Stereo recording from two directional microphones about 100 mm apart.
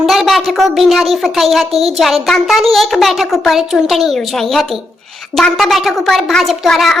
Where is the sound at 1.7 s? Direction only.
80° right.